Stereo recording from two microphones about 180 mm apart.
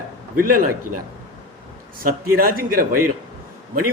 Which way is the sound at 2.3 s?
55° right (ahead or behind).